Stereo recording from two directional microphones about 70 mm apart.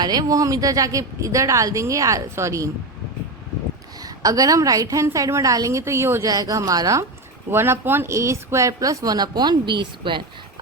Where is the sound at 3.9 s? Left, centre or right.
Right.